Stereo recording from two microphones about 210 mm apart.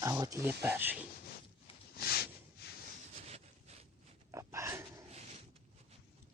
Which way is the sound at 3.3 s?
30° right (ahead or behind).